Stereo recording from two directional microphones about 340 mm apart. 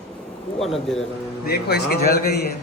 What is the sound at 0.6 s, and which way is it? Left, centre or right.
Speech, centre.